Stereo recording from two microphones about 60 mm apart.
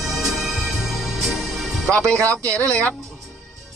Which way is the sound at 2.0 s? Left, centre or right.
Right.